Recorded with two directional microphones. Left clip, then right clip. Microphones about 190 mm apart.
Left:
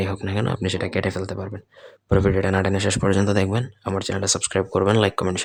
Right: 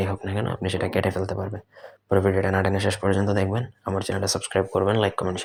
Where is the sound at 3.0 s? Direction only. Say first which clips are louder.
Left 3 dB; 20° left (ahead or behind).